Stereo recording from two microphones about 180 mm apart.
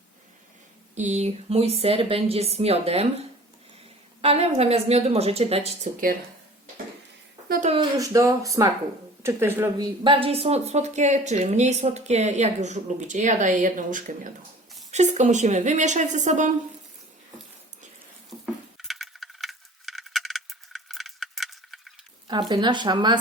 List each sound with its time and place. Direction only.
0.9 s a woman's voice: 40° right (ahead or behind)
7.4 s a sound: 55° right (ahead or behind)
7.9 s a woman's voice: 20° right (ahead or behind); by 16.5 s 40° right (ahead or behind)
18.8 s coin: centre (ahead or behind)
22.3 s speech: 25° right (ahead or behind)